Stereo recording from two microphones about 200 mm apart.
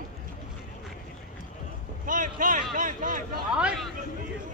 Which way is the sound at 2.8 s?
40° right (ahead or behind).